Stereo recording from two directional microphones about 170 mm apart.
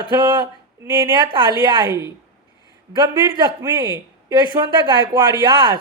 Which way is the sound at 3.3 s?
20° right (ahead or behind).